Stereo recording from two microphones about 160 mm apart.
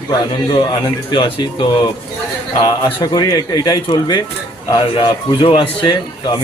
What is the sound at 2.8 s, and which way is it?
A man's voice, 30° left (ahead or behind).